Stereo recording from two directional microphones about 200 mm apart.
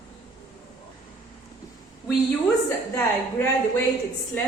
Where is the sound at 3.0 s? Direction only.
10° left (ahead or behind).